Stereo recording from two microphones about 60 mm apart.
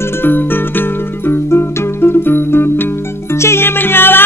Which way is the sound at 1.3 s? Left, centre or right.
Left.